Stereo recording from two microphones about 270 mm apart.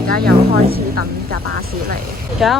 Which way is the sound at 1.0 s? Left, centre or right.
Left.